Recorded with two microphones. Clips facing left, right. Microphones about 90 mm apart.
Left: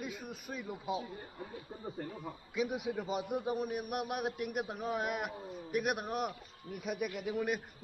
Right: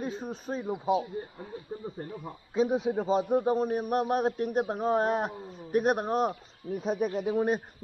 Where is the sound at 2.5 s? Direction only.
30° right (ahead or behind).